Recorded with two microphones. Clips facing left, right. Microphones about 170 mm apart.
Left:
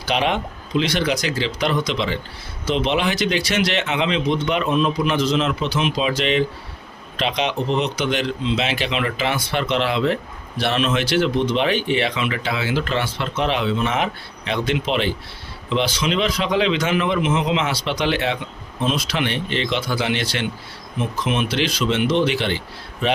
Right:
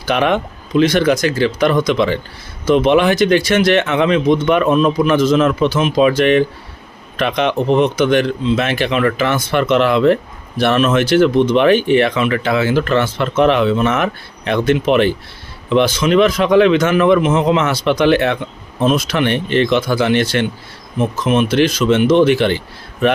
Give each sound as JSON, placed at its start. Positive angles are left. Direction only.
{"t": 0.0, "sound": "speech", "side_deg": -55}